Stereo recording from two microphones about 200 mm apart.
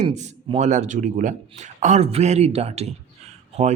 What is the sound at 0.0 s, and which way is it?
A man's voice, 35° right (ahead or behind).